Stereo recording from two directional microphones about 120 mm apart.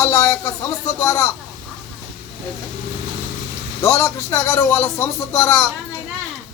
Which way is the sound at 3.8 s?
25° left (ahead or behind).